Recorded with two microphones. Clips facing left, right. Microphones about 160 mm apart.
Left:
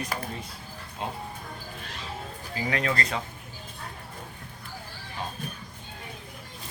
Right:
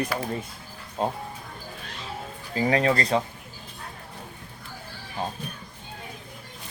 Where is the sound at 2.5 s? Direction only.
35° right (ahead or behind).